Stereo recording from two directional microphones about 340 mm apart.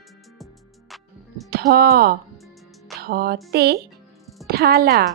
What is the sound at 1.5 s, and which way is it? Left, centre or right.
Speech, right.